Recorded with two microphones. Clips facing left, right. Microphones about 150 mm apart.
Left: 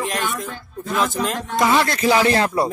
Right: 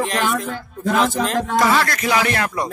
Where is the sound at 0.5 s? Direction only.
80° right.